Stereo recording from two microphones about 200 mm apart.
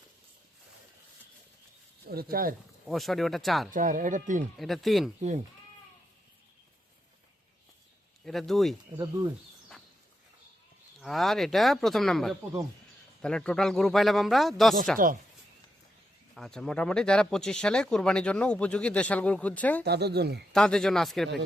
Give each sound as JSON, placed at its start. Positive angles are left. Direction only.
{"t": 2.0, "sound": "speech", "side_deg": -50}
{"t": 2.8, "sound": "speech", "side_deg": 0}
{"t": 3.7, "sound": "speech", "side_deg": -40}
{"t": 4.5, "sound": "speech", "side_deg": 0}
{"t": 8.2, "sound": "speech", "side_deg": 0}
{"t": 11.0, "sound": "speech", "side_deg": 0}
{"t": 16.3, "sound": "speech", "side_deg": 5}
{"t": 19.8, "sound": "speech", "side_deg": -55}
{"t": 20.5, "sound": "speech", "side_deg": 5}